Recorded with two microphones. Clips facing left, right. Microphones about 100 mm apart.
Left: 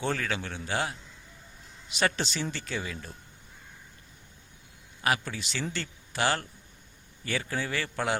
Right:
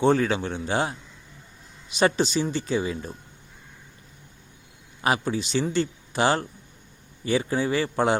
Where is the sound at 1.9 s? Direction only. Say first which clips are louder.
Right 7 dB; 15° right (ahead or behind).